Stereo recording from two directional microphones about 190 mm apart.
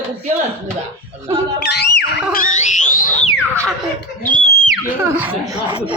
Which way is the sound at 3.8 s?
5° left (ahead or behind).